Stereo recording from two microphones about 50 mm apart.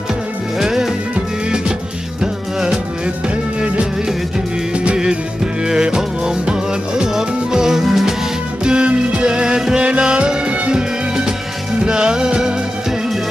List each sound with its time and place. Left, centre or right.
0.6 s music: centre
5.7 s music: centre
8.6 s music: centre